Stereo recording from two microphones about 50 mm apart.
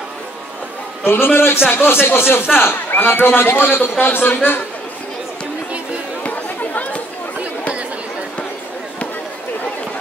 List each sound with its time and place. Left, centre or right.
1.0 s a man's voice: left
6.2 s chatter: left